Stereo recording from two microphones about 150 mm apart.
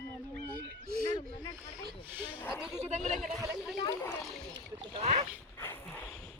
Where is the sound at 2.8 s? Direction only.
50° right (ahead or behind).